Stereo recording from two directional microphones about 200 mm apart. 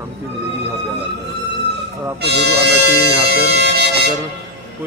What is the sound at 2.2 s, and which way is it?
Speech, 55° right (ahead or behind).